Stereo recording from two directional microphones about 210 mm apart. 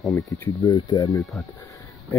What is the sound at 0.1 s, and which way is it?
Speech, 15° left (ahead or behind).